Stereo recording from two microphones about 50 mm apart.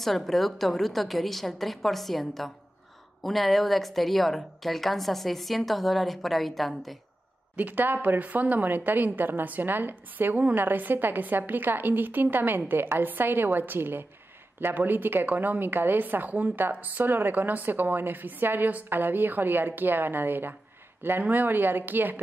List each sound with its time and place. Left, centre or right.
0.0 s a woman's voice: centre
7.5 s a woman's voice: right